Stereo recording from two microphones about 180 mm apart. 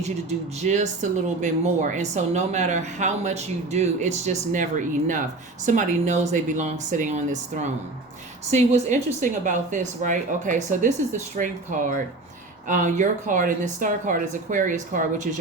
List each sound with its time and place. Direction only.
0.0 s speech: 40° right (ahead or behind)
8.4 s speech: 40° right (ahead or behind)